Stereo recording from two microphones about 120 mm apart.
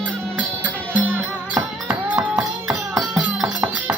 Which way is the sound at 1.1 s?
10° right (ahead or behind).